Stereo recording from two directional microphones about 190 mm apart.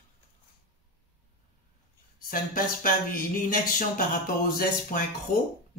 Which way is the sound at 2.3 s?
45° left (ahead or behind).